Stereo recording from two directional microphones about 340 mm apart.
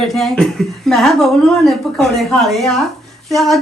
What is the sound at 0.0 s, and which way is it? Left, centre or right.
A man's voice, centre.